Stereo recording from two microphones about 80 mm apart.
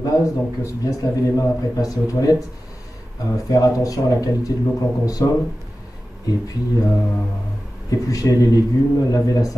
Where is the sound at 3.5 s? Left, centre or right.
Left.